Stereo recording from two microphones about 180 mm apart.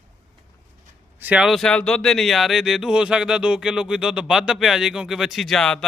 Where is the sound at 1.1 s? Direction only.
10° right (ahead or behind).